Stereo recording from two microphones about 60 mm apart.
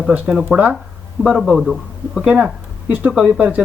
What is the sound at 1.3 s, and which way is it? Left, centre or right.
Speech, centre.